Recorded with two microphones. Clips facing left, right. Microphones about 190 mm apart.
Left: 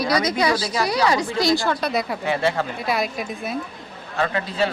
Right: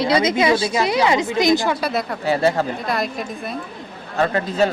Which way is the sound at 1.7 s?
5° right (ahead or behind).